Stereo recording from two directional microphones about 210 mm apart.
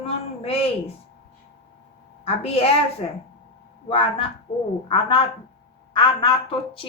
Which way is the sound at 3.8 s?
25° left (ahead or behind).